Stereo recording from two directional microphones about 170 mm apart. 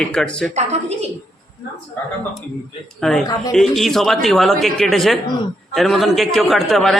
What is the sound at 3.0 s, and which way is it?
A man's voice, centre (ahead or behind).